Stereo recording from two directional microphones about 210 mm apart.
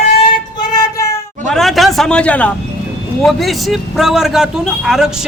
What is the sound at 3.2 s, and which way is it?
A man's voice, centre (ahead or behind).